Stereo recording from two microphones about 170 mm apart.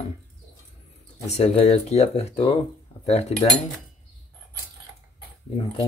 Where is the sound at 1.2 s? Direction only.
40° left (ahead or behind).